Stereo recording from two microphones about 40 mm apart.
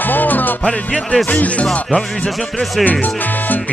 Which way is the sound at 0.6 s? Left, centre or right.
Left.